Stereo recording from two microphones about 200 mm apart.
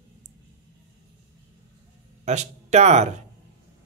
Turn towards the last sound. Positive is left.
turn(degrees=-35)  # may be behind; listen again after turning